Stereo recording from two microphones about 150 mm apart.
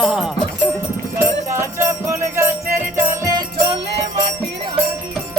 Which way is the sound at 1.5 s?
20° right (ahead or behind).